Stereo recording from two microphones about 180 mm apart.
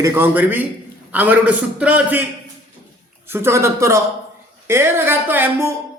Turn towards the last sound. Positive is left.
turn(degrees=-15)  # may be behind; listen again after turning